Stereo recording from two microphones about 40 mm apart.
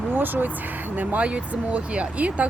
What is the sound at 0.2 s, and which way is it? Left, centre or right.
Speech, right.